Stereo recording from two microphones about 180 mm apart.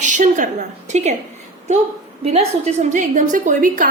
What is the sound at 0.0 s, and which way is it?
A woman's voice, 45° right (ahead or behind).